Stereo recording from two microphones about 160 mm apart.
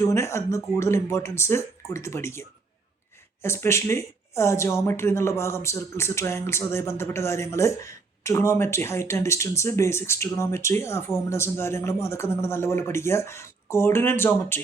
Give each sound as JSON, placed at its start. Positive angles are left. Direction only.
{"t": 0.0, "sound": "speech", "side_deg": 15}
{"t": 3.4, "sound": "speech", "side_deg": 15}